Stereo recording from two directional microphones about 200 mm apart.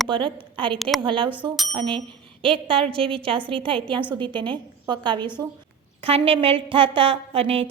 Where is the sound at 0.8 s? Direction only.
Centre (ahead or behind).